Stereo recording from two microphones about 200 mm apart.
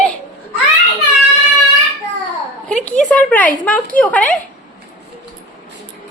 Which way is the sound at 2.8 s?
5° left (ahead or behind).